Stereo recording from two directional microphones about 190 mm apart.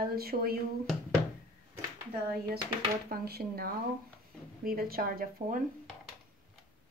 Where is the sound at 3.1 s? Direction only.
55° right (ahead or behind).